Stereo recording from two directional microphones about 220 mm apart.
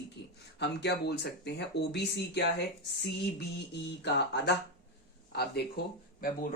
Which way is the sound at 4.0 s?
50° left (ahead or behind).